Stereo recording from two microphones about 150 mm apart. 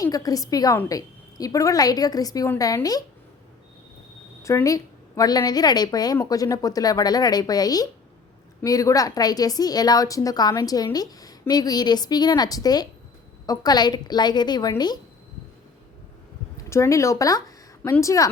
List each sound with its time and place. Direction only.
0.0 s a woman's voice: 25° left (ahead or behind)
4.4 s a woman's voice: 20° left (ahead or behind)
16.6 s a woman's voice: 20° left (ahead or behind)